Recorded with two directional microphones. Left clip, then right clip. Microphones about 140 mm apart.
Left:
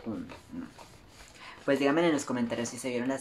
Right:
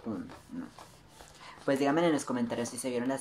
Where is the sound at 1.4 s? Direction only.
15° right (ahead or behind).